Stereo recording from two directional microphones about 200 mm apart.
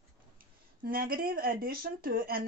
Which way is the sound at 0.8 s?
45° right (ahead or behind).